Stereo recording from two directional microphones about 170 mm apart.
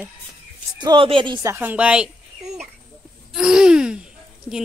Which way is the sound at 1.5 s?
10° right (ahead or behind).